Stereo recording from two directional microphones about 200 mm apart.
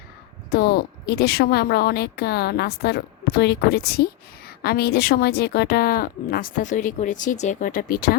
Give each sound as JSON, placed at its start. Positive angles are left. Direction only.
{"t": 0.5, "sound": "a woman's voice", "side_deg": 50}